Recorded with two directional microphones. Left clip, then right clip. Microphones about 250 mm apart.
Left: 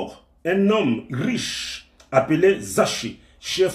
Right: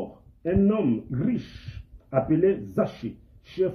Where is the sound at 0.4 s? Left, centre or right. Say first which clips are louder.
Left 5 dB; centre.